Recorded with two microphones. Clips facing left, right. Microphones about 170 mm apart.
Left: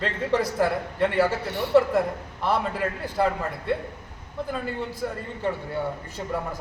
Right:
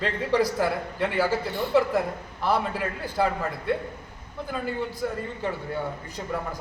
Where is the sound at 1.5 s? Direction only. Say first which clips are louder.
Even; 75° left (ahead or behind).